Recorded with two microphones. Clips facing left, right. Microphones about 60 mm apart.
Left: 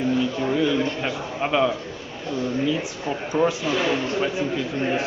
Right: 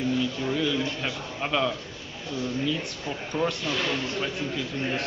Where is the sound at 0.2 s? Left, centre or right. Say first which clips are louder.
Left 5 dB; centre.